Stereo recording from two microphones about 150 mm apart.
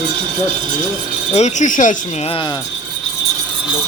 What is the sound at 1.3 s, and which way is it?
Speech, 50° left (ahead or behind).